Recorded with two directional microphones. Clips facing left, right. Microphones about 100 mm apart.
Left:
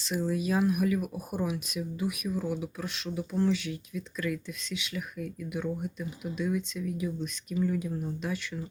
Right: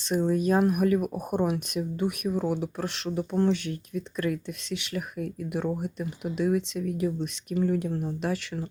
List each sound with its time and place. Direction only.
0.1 s speech: 45° right (ahead or behind); by 8.6 s 70° right (ahead or behind)